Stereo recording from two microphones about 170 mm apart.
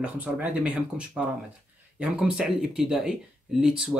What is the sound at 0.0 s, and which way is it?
Speech, 10° right (ahead or behind).